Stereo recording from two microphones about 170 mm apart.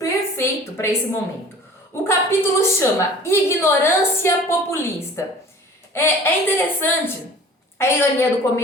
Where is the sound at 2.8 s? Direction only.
15° left (ahead or behind).